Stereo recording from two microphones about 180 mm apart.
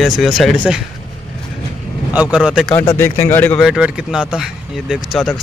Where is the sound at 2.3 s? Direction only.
5° right (ahead or behind).